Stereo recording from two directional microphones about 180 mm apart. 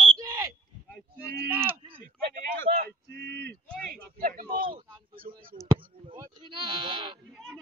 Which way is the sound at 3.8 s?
55° right (ahead or behind).